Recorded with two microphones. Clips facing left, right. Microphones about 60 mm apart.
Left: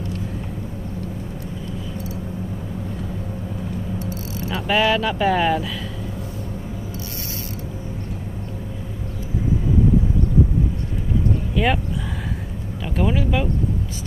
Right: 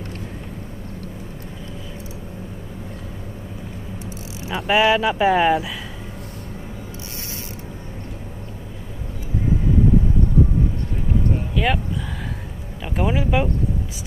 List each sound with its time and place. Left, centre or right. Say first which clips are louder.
4.4 s speech: right 2 dB; centre
11.5 s speech: left 2 dB; centre
12.8 s speech: even; centre